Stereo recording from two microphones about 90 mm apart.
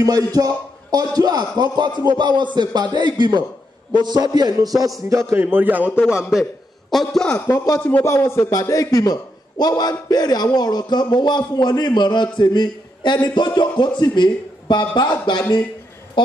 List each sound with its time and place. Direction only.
0.0 s a man's voice: 45° right (ahead or behind)
5.4 s a man's voice: 20° right (ahead or behind)
6.9 s a man's voice: 5° left (ahead or behind)
7.4 s a man's voice: 35° left (ahead or behind); by 15.4 s 60° left (ahead or behind)